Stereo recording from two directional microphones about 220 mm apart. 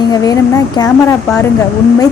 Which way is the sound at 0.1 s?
15° left (ahead or behind).